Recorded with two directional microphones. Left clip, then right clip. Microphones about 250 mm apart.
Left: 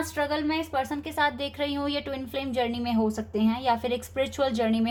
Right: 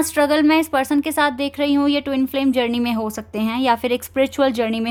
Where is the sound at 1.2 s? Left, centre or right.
Right.